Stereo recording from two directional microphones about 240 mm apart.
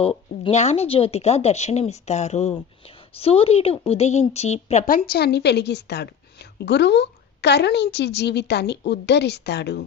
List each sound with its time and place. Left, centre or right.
0.0 s speech: left